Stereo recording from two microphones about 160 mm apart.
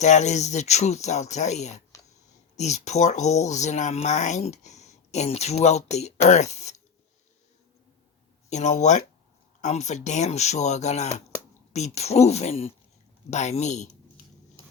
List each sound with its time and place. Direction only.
0.0 s speech: 45° left (ahead or behind)
8.4 s speech: 45° left (ahead or behind)